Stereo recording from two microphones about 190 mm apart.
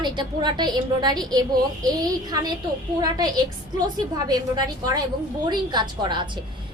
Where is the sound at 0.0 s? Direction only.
25° right (ahead or behind).